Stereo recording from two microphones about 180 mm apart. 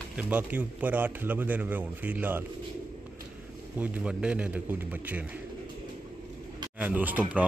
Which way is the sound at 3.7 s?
5° right (ahead or behind).